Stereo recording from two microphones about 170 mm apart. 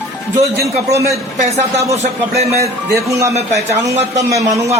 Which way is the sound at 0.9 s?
15° right (ahead or behind).